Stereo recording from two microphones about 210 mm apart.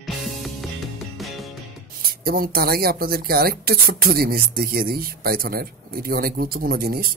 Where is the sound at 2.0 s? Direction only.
45° right (ahead or behind).